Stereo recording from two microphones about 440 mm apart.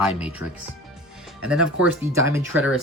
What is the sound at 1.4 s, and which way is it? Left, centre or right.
Speech, centre.